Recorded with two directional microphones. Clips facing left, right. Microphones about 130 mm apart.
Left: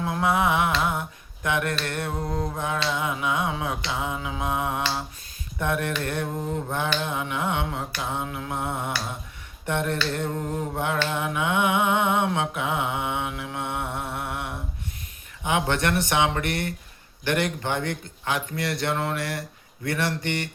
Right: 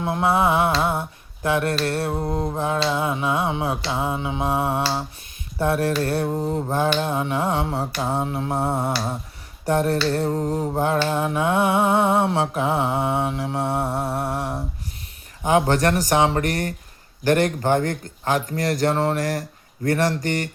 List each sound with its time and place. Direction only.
0.0 s mantra: 30° right (ahead or behind)